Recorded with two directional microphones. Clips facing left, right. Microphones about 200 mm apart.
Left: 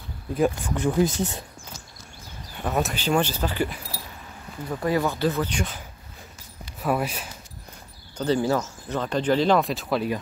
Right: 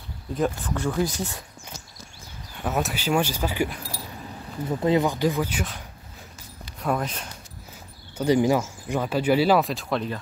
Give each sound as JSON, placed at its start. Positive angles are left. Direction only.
{"t": 0.3, "sound": "speech", "side_deg": 10}
{"t": 2.6, "sound": "speech", "side_deg": -5}
{"t": 4.6, "sound": "speech", "side_deg": -20}
{"t": 6.8, "sound": "speech", "side_deg": 5}
{"t": 8.2, "sound": "speech", "side_deg": -15}